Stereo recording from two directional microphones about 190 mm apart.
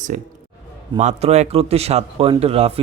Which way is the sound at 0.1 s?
40° right (ahead or behind).